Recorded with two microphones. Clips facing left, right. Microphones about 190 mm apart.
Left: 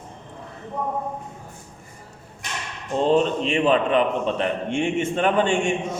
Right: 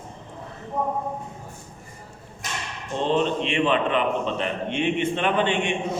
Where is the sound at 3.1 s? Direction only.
40° left (ahead or behind).